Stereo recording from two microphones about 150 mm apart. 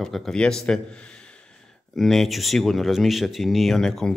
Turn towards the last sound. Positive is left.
turn(degrees=5)  # may be behind; listen again after turning